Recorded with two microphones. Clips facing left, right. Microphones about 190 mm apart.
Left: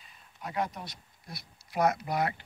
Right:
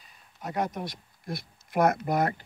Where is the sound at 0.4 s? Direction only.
45° right (ahead or behind).